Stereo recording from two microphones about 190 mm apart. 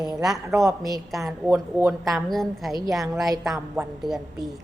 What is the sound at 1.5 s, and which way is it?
Speech, 15° right (ahead or behind).